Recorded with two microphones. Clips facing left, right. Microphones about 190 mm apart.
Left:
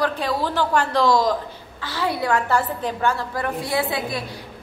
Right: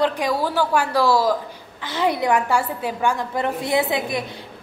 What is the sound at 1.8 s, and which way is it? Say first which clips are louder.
A woman's voice: right 3 dB; 20° right (ahead or behind).